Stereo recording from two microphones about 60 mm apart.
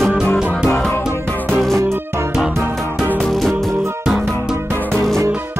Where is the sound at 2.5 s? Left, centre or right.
Right.